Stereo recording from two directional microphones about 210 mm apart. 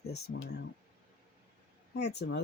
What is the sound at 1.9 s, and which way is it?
Speech, 55° left (ahead or behind).